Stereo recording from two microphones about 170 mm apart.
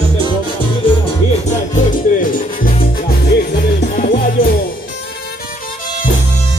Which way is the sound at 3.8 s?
55° left (ahead or behind).